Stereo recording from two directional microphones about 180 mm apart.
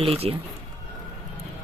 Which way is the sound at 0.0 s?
30° right (ahead or behind).